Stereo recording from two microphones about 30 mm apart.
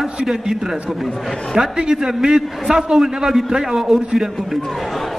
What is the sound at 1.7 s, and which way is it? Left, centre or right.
A man's voice, right.